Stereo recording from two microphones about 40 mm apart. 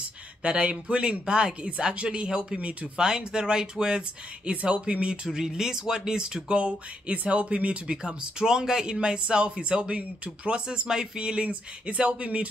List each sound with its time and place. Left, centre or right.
0.4 s speech: right
4.5 s speech: right
7.8 s speech: centre